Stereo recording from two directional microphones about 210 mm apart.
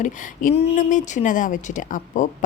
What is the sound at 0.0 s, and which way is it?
Speech, 30° left (ahead or behind).